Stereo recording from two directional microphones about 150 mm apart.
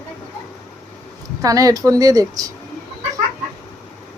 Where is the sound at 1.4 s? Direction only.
25° right (ahead or behind).